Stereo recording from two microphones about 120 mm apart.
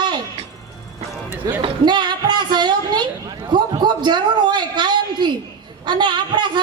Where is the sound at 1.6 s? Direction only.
40° right (ahead or behind).